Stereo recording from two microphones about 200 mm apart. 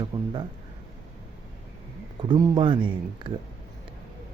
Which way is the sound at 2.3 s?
25° right (ahead or behind).